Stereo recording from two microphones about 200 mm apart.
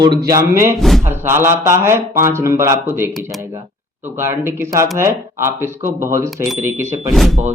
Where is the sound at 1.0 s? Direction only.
10° right (ahead or behind).